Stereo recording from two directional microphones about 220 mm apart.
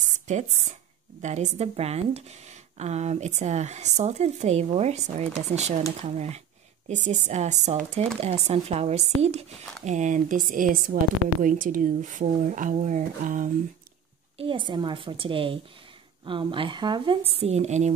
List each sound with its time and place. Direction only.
0.3 s a woman's voice: 30° right (ahead or behind)
14.3 s a woman's voice: 25° right (ahead or behind)